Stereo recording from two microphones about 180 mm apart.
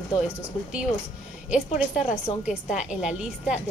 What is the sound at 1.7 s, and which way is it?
Speech, 40° left (ahead or behind).